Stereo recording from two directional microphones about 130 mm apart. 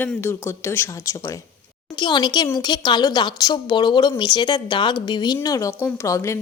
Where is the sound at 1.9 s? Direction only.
35° left (ahead or behind).